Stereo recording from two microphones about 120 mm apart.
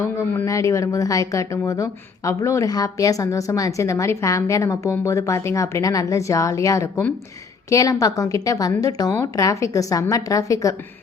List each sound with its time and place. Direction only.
0.0 s a woman's voice: 20° left (ahead or behind)